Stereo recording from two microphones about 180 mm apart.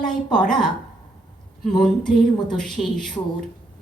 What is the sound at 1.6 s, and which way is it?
A woman's voice, centre (ahead or behind).